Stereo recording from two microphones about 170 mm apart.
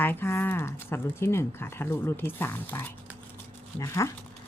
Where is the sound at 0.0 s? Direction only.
10° left (ahead or behind).